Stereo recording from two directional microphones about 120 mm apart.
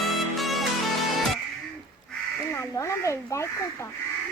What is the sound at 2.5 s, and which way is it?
Crow, 25° left (ahead or behind).